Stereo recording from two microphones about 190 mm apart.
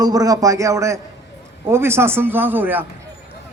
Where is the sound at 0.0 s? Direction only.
20° right (ahead or behind).